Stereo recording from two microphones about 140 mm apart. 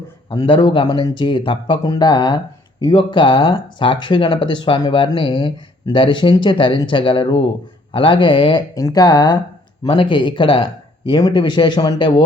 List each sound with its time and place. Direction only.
0.3 s speech: 40° left (ahead or behind)